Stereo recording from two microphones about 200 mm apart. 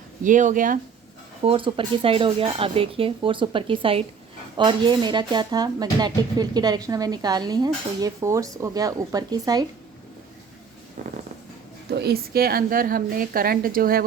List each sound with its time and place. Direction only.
0.2 s speech: 40° right (ahead or behind)
1.5 s speech: 25° right (ahead or behind)
11.9 s a woman's voice: 55° right (ahead or behind)